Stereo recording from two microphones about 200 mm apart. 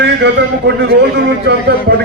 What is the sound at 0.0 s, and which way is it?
A man's voice, 60° right (ahead or behind).